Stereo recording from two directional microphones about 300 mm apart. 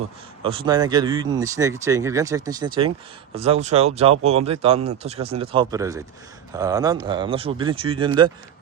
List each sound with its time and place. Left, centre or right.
0.4 s speech: centre